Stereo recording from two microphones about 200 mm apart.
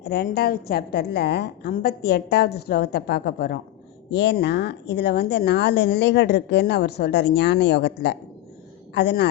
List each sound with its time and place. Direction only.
0.0 s a woman's voice: 55° left (ahead or behind)